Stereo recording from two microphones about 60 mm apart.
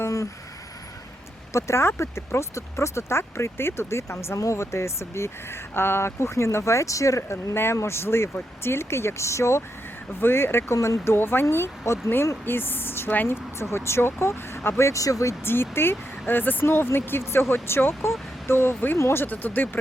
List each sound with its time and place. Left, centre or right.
1.5 s speech: left
7.5 s speech: left
10.2 s speech: left
12.5 s speech: left
15.4 s speech: left